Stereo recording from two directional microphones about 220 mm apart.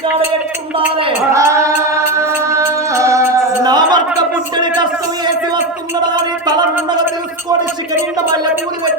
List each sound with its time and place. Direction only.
1.3 s female singing: 15° right (ahead or behind)
2.5 s music: 15° right (ahead or behind)